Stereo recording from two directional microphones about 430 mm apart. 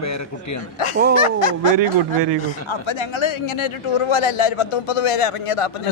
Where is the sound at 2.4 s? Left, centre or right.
Left.